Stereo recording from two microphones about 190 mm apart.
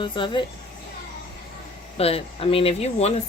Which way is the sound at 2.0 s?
30° left (ahead or behind).